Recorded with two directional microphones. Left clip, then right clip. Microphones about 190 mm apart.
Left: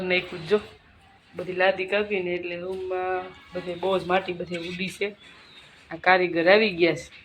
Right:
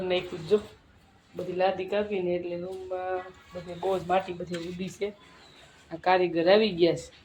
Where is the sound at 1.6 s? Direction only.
5° left (ahead or behind).